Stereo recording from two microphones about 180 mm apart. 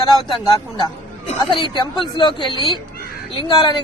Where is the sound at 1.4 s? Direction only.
25° left (ahead or behind).